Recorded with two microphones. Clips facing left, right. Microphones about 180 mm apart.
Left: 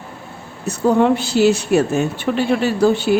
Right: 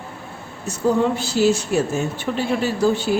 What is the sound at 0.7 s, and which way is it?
A woman's voice, 65° left (ahead or behind).